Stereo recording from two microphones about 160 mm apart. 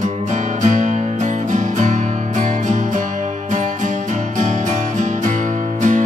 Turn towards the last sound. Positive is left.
turn(degrees=-50)  # may be behind; listen again after turning